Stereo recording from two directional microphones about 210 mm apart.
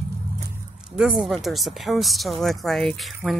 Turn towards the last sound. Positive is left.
turn(degrees=0)  # may be behind; listen again after turning